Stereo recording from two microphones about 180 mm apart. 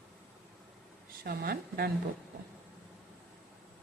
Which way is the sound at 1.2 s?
55° right (ahead or behind).